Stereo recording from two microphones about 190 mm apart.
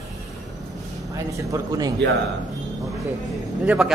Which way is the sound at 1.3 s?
15° right (ahead or behind).